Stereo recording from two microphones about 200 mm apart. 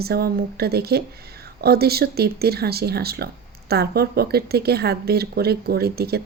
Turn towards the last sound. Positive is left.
turn(degrees=-50)  # may be behind; listen again after turning